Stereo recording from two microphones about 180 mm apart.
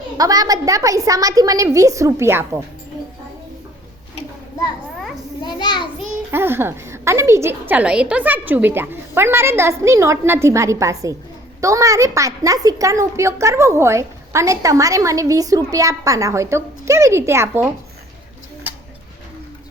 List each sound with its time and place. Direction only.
0.2 s a woman's voice: 20° right (ahead or behind)
5.4 s a sound: 25° left (ahead or behind)
6.3 s a woman's voice: 10° right (ahead or behind)